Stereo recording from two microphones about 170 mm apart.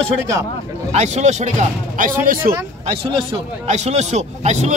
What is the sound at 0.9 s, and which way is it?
A man's voice, 40° right (ahead or behind).